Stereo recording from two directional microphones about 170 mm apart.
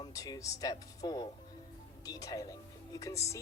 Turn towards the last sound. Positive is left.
turn(degrees=15)  # may be behind; listen again after turning